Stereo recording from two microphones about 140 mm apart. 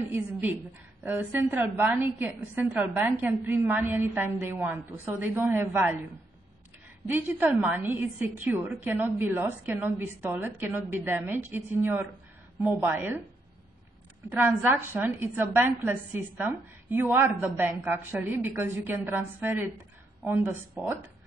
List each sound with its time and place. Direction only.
0.1 s a woman's voice: 15° right (ahead or behind)
7.1 s a woman's voice: 15° right (ahead or behind)
14.3 s a woman's voice: 15° right (ahead or behind)